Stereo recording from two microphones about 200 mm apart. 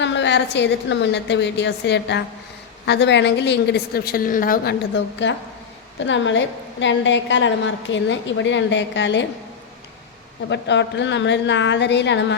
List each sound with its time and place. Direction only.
0.0 s a woman's voice: 65° left (ahead or behind)
10.5 s a woman's voice: 60° left (ahead or behind)